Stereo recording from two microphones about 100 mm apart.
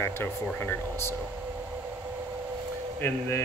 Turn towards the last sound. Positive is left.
turn(degrees=25)  # may be behind; listen again after turning